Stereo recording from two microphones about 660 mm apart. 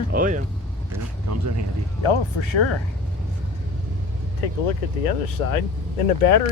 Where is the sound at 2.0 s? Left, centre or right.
Left.